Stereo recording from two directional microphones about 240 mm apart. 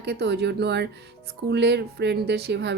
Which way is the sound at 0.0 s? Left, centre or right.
Right.